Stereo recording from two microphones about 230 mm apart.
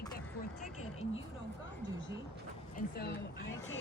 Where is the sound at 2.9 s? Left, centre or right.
Left.